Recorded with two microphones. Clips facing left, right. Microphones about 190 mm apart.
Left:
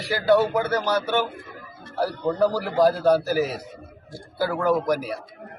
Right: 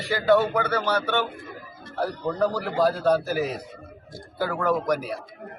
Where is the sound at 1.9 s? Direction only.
10° left (ahead or behind).